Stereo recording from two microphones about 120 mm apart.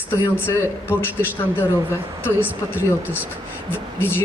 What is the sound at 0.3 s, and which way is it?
Speech, 20° left (ahead or behind).